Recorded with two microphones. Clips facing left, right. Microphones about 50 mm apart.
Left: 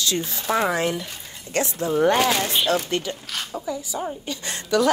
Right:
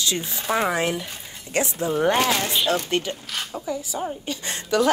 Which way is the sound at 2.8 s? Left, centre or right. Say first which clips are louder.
Right 1 dB; right.